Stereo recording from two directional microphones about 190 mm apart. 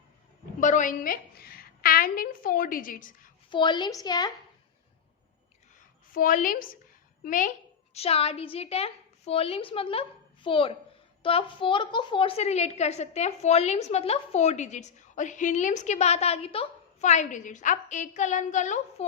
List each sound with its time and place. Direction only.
0.6 s a woman's voice: 40° left (ahead or behind)
3.5 s a woman's voice: 25° left (ahead or behind)
6.1 s a woman's voice: 45° left (ahead or behind)
7.9 s a woman's voice: 30° left (ahead or behind)